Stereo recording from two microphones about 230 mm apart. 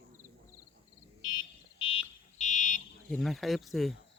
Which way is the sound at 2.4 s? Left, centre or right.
Left.